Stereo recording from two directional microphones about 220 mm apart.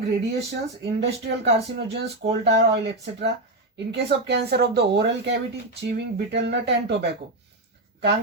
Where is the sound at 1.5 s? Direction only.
50° right (ahead or behind).